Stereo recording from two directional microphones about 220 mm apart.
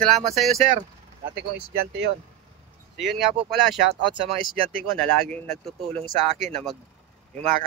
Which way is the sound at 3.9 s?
25° right (ahead or behind).